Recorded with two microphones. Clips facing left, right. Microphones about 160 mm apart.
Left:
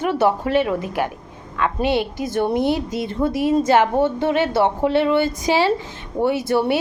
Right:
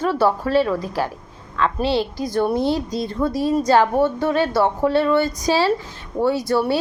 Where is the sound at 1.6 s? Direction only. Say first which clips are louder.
Even; 15° left (ahead or behind).